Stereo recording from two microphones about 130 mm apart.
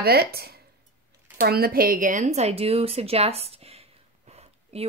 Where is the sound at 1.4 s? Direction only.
90° right.